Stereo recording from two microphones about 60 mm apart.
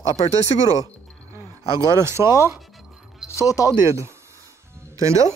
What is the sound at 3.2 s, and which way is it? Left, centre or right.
Speech, left.